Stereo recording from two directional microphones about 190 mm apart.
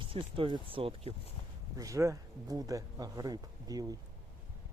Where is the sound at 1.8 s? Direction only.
15° right (ahead or behind).